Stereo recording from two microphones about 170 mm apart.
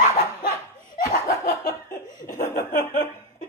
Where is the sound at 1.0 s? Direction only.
50° left (ahead or behind).